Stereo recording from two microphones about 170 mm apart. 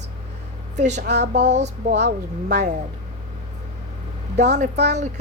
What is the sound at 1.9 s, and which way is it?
Speech, 85° right.